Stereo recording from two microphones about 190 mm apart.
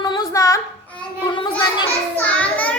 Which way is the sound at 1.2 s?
20° left (ahead or behind).